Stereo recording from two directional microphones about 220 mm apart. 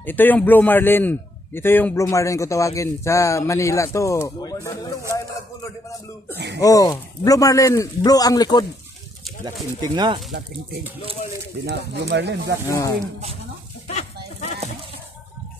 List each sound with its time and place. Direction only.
0.0 s a man's voice: 10° left (ahead or behind)
6.3 s speech: 50° right (ahead or behind)
6.6 s a man's voice: 15° left (ahead or behind)
9.4 s speech: 20° right (ahead or behind)
11.6 s speech: 50° right (ahead or behind)
13.8 s livestock: 30° left (ahead or behind)